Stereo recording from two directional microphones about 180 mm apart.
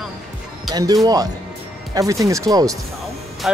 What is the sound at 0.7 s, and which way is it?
Speech, 20° right (ahead or behind).